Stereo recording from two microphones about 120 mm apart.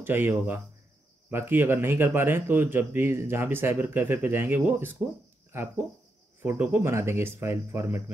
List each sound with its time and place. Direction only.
0.0 s speech: 15° right (ahead or behind)